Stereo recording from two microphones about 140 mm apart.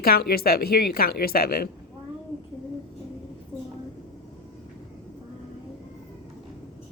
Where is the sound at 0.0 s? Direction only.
90° left.